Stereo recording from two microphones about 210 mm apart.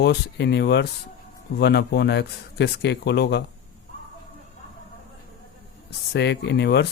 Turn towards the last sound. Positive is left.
turn(degrees=50)  # may be behind; listen again after turning